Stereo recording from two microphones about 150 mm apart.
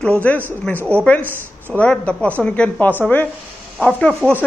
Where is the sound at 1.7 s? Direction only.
5° left (ahead or behind).